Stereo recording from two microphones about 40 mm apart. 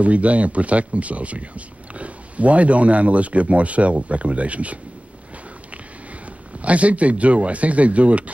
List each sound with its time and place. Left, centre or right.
0.0 s speech: right
6.2 s speech: right